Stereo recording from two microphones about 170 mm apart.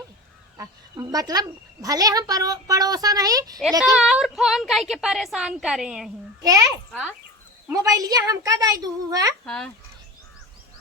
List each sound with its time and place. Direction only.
0.5 s speech: 20° right (ahead or behind)
3.9 s a woman's voice: 5° right (ahead or behind)
6.4 s a child's voice: 20° right (ahead or behind)
6.9 s a woman's voice: 5° right (ahead or behind)
7.7 s speech: 20° right (ahead or behind)
9.5 s a woman's voice: 5° left (ahead or behind)